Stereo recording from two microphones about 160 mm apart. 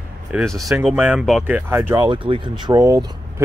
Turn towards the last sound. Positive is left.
turn(degrees=-20)  # may be behind; listen again after turning